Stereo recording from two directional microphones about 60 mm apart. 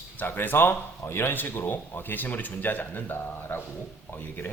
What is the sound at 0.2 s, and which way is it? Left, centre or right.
Speech, left.